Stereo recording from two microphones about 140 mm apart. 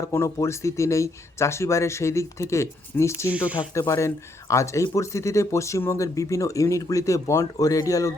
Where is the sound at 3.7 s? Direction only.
20° left (ahead or behind).